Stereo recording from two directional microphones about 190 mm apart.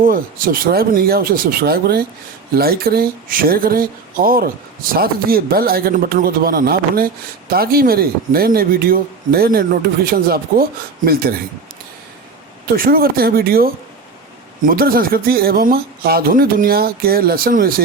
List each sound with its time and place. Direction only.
0.0 s speech: 50° right (ahead or behind)
12.6 s speech: 50° right (ahead or behind)
14.7 s speech: 50° right (ahead or behind)